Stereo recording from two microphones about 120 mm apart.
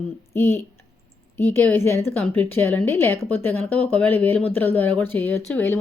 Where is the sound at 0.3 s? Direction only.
20° left (ahead or behind).